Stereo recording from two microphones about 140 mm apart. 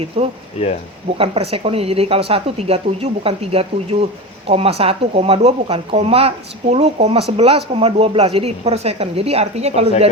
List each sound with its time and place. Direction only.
0.2 s speech: 45° right (ahead or behind)